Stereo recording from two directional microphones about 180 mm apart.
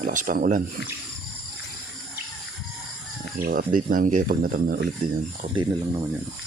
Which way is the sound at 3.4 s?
55° right (ahead or behind).